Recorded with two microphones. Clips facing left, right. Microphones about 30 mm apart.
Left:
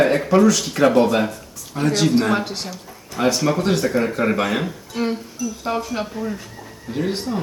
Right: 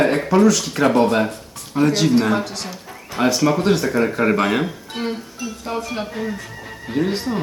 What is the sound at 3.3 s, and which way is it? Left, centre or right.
Speech, centre.